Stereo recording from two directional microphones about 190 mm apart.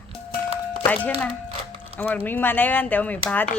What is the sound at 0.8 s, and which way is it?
Speech, 10° left (ahead or behind).